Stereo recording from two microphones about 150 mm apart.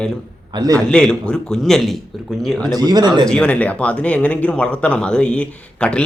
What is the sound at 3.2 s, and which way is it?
Speech, 5° left (ahead or behind).